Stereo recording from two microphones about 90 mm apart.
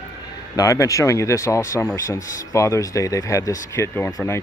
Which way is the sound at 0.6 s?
40° left (ahead or behind).